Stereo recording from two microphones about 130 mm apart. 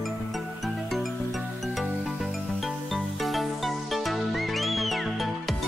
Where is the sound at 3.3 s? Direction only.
Centre (ahead or behind).